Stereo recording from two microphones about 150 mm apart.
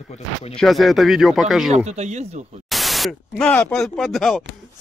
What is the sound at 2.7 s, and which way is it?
Speech, centre (ahead or behind).